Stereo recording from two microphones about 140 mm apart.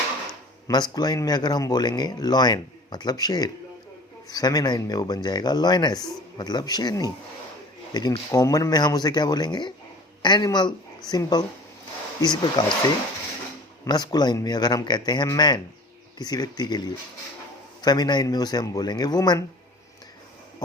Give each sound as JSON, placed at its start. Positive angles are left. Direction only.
{"t": 0.7, "sound": "a man's voice", "side_deg": 30}
{"t": 13.8, "sound": "speech", "side_deg": 30}